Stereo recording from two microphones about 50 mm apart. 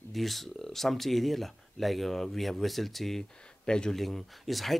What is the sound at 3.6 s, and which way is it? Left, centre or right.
Speech, centre.